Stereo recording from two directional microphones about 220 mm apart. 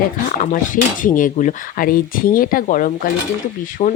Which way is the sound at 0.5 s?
35° left (ahead or behind).